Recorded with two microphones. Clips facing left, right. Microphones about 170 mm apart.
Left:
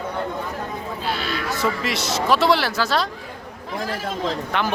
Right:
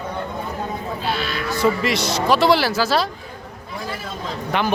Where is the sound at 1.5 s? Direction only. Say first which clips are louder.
Right 7 dB; centre (ahead or behind).